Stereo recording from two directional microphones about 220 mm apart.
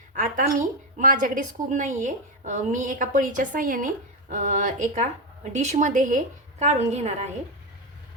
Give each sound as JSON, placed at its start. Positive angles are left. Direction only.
{"t": 0.2, "sound": "a woman's voice", "side_deg": -35}